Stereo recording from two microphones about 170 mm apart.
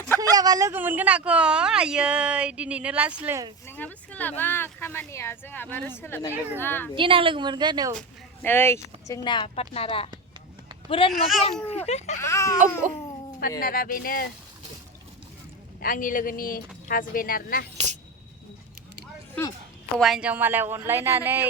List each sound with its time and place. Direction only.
0.2 s a woman's voice: 20° right (ahead or behind)
3.7 s speech: 10° left (ahead or behind)
6.9 s a woman's voice: 30° right (ahead or behind)
7.9 s a child's voice: 10° left (ahead or behind); by 11.1 s 35° left (ahead or behind)
11.1 s a child's voice: centre (ahead or behind)
11.6 s a child's voice: 40° left (ahead or behind)
12.2 s speech: 15° left (ahead or behind)
13.6 s speech: 55° left (ahead or behind)
15.8 s speech: 55° left (ahead or behind)
20.0 s a woman's voice: centre (ahead or behind)